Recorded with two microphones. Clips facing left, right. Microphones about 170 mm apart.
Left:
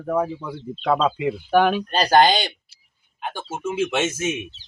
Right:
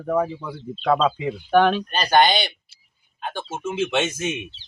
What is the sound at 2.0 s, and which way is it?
Speech, 35° left (ahead or behind).